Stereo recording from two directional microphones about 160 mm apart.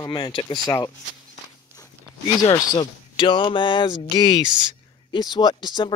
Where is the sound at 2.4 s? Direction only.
25° left (ahead or behind).